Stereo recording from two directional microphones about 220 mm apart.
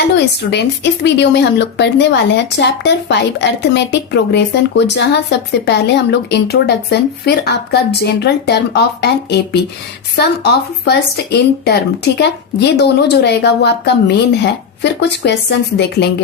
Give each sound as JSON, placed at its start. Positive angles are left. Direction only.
{"t": 0.4, "sound": "speech", "side_deg": 45}